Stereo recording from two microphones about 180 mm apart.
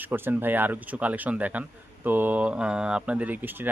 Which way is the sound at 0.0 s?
10° right (ahead or behind).